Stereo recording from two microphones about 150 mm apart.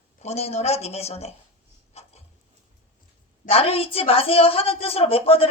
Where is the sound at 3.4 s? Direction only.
40° left (ahead or behind).